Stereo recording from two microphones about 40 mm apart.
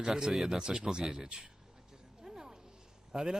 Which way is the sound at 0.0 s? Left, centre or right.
Centre.